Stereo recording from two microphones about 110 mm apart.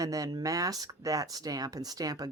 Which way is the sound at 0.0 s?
30° right (ahead or behind).